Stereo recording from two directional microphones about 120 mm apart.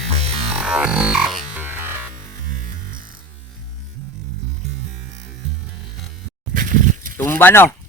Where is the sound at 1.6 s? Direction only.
15° right (ahead or behind).